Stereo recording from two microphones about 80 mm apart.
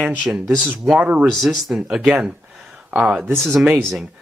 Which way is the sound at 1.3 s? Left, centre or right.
Centre.